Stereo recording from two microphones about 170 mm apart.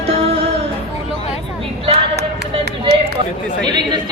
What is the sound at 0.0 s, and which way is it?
Music, 35° right (ahead or behind).